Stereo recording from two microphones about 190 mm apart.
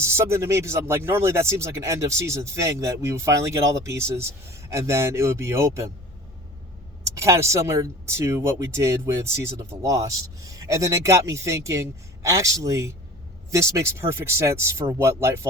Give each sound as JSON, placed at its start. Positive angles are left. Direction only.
{"t": 0.0, "sound": "speech", "side_deg": -15}
{"t": 7.2, "sound": "speech", "side_deg": -15}